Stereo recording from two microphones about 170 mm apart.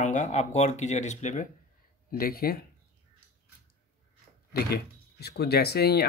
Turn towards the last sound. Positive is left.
turn(degrees=70)  # may be behind; listen again after turning